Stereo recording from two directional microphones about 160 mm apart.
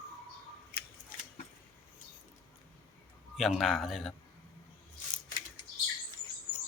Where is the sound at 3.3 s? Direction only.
Centre (ahead or behind).